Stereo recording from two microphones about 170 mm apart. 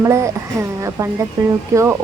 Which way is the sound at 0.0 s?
15° right (ahead or behind).